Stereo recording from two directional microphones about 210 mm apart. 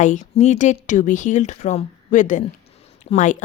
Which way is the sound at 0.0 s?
35° left (ahead or behind).